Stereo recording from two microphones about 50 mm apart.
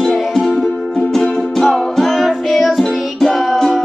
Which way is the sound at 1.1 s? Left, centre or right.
Centre.